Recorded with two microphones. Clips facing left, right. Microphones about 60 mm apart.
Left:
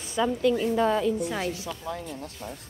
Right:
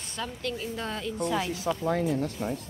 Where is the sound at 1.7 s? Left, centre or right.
Right.